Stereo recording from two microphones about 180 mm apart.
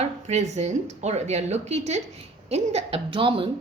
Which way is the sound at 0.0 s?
40° right (ahead or behind).